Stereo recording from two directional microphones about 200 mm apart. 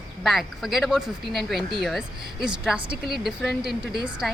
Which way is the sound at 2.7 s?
25° right (ahead or behind).